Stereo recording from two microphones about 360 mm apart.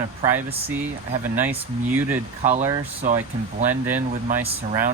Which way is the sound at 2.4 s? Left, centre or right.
Centre.